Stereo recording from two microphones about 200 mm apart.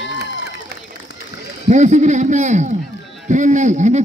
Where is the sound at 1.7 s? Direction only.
35° right (ahead or behind).